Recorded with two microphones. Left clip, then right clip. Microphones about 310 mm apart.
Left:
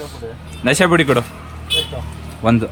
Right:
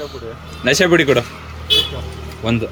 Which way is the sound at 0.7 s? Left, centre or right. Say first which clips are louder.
Right 1 dB; centre.